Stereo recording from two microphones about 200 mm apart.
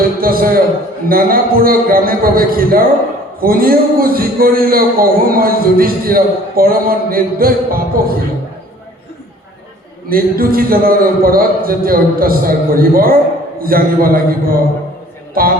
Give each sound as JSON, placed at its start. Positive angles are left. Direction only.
{"t": 0.0, "sound": "a man's voice", "side_deg": -45}
{"t": 10.1, "sound": "a man's voice", "side_deg": -45}